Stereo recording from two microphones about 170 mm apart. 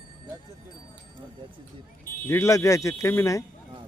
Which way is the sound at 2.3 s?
15° left (ahead or behind).